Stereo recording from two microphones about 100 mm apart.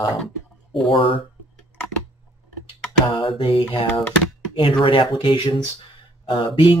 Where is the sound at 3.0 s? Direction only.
45° left (ahead or behind).